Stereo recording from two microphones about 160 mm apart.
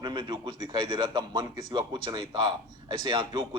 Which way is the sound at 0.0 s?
30° right (ahead or behind).